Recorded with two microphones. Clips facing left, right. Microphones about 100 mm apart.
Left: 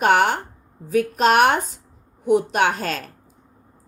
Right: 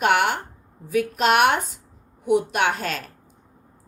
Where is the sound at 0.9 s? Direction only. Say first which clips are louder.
Left 2 dB; 40° left (ahead or behind).